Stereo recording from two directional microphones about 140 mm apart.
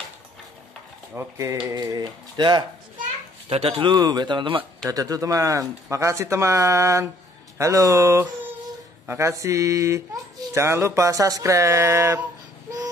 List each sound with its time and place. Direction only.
1.1 s speech: 20° right (ahead or behind)
3.4 s speech: 45° right (ahead or behind); by 12.2 s 20° right (ahead or behind)